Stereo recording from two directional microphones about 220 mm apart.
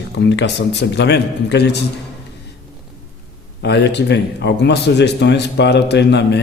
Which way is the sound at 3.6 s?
50° left (ahead or behind).